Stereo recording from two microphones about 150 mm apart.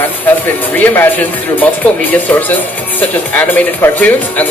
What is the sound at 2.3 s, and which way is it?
Speech, 10° left (ahead or behind).